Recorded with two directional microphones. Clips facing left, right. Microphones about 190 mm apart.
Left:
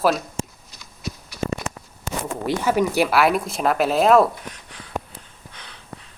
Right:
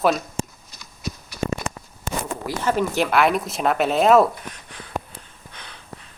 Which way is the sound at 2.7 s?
10° left (ahead or behind).